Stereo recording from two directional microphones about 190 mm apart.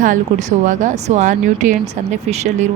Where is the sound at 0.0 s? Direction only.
40° right (ahead or behind).